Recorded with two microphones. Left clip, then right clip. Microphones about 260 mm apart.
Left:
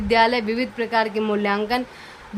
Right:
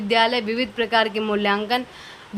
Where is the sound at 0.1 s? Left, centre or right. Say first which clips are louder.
Left 1 dB; centre.